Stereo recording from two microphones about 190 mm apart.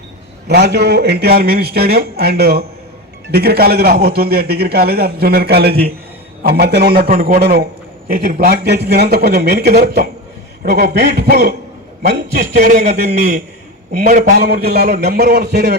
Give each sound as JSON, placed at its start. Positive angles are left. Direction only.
{"t": 0.4, "sound": "a man's voice", "side_deg": -60}
{"t": 14.0, "sound": "a man's voice", "side_deg": -45}
{"t": 14.4, "sound": "a man's voice", "side_deg": -55}